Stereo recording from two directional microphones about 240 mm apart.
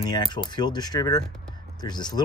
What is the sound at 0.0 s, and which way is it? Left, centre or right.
Speech, centre.